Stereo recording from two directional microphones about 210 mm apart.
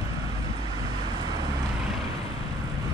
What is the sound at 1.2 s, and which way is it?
Vehicle, 20° right (ahead or behind).